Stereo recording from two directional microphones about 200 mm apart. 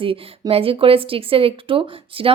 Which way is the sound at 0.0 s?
25° right (ahead or behind).